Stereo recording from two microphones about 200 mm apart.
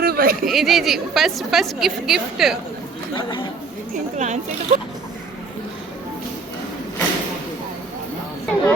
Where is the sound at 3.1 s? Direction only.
25° left (ahead or behind).